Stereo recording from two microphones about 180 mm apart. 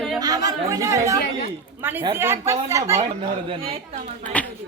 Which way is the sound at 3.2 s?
30° right (ahead or behind).